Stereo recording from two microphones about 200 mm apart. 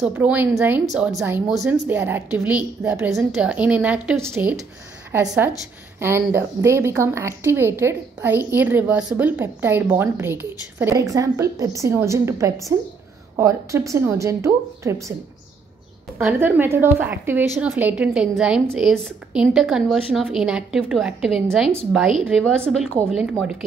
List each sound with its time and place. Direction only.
0.0 s speech: 10° right (ahead or behind)
16.2 s a woman's voice: 10° right (ahead or behind)